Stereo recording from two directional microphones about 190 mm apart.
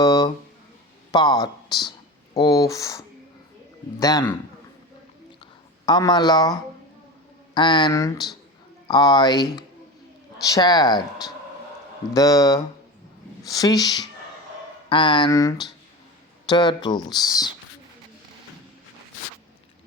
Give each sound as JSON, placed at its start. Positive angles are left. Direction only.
{"t": 0.0, "sound": "a sound", "side_deg": 20}
{"t": 1.1, "sound": "speech", "side_deg": 20}
{"t": 4.0, "sound": "speech", "side_deg": 20}
{"t": 5.4, "sound": "a sound", "side_deg": 20}
{"t": 7.5, "sound": "speech", "side_deg": 25}
{"t": 12.1, "sound": "speech", "side_deg": 20}